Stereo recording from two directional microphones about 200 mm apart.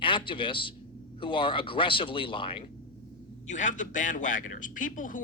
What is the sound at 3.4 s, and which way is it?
A man's voice, 40° left (ahead or behind).